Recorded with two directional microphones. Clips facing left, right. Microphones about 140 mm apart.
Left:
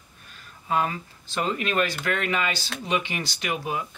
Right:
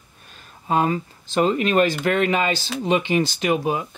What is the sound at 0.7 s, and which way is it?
Speech, 30° right (ahead or behind).